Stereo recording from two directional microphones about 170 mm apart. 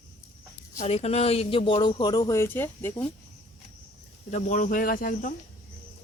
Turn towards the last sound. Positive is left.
turn(degrees=55)  # may be behind; listen again after turning